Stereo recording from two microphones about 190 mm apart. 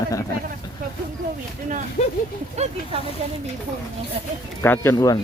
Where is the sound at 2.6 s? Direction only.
35° right (ahead or behind).